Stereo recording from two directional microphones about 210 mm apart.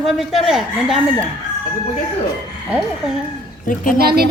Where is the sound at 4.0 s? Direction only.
45° right (ahead or behind).